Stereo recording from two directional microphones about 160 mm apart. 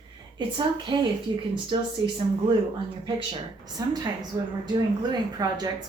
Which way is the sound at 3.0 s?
25° right (ahead or behind).